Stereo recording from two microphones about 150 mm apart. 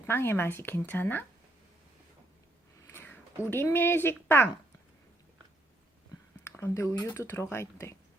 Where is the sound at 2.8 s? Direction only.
15° left (ahead or behind).